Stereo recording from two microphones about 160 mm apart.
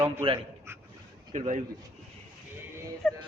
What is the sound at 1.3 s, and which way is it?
Speech, 50° right (ahead or behind).